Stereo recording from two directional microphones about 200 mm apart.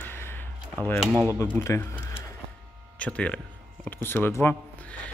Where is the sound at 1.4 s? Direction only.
15° left (ahead or behind).